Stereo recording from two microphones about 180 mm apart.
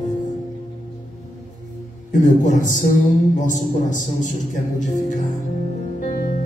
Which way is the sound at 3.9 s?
45° left (ahead or behind).